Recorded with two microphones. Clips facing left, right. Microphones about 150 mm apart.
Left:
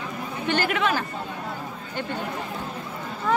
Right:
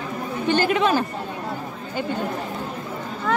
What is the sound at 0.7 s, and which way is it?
Speech, 25° right (ahead or behind).